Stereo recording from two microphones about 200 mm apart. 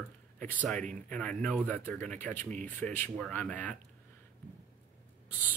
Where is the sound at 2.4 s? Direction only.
35° right (ahead or behind).